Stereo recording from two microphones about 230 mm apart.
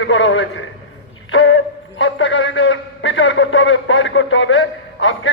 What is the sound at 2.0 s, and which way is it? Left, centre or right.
A man's voice, left.